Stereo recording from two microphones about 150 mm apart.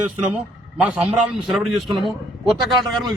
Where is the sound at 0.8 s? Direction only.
5° right (ahead or behind).